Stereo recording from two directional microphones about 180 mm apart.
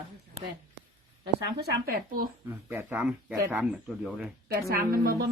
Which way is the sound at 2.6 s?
10° right (ahead or behind).